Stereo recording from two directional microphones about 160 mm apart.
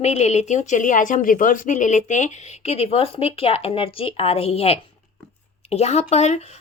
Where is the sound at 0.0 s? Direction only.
45° left (ahead or behind).